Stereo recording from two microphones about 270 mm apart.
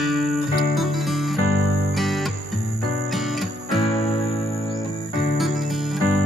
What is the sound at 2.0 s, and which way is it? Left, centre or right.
Music, centre.